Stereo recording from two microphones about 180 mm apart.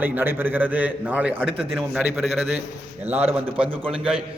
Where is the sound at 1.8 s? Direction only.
10° right (ahead or behind).